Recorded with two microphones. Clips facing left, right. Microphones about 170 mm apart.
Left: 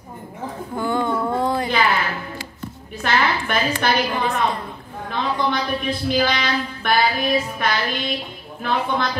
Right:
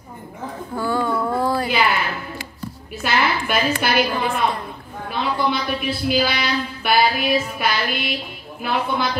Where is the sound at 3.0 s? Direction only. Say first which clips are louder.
Even; 10° right (ahead or behind).